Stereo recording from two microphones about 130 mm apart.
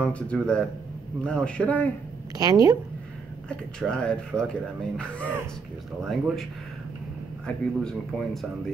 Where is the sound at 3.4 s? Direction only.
5° left (ahead or behind).